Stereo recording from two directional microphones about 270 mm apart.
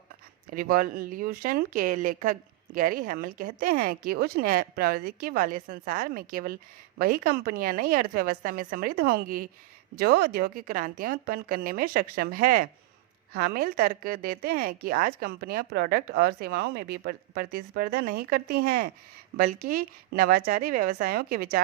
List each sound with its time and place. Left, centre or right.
0.5 s speech: right